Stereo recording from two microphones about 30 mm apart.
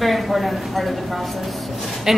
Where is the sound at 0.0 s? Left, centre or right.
Centre.